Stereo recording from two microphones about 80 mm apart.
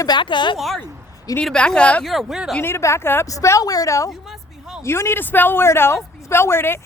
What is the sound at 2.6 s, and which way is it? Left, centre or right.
Speech, left.